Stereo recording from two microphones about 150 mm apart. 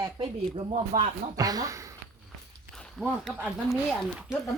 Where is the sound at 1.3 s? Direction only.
25° right (ahead or behind).